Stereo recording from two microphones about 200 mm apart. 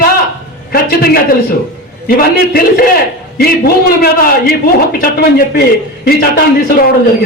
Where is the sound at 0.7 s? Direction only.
50° left (ahead or behind).